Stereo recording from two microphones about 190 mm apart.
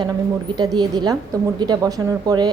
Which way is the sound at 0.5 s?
20° right (ahead or behind).